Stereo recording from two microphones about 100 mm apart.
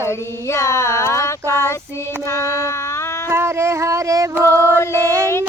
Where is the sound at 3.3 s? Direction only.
25° right (ahead or behind).